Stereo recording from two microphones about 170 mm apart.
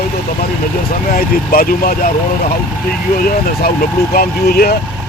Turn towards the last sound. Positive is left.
turn(degrees=65)  # may be behind; listen again after turning